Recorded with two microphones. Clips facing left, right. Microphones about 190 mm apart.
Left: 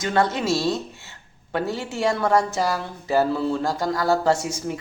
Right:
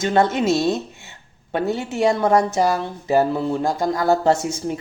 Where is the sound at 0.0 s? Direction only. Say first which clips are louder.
Right 4 dB; 25° right (ahead or behind).